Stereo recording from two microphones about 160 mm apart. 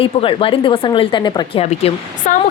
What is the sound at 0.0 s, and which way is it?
Speech, 35° left (ahead or behind).